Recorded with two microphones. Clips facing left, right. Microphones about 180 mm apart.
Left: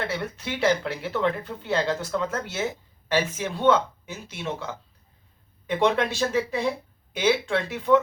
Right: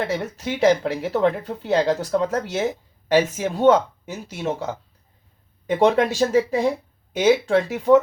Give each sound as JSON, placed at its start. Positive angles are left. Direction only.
{"t": 0.1, "sound": "speech", "side_deg": -40}
{"t": 5.7, "sound": "speech", "side_deg": -40}